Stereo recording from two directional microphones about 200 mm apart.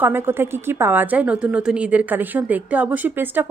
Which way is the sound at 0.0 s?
10° right (ahead or behind).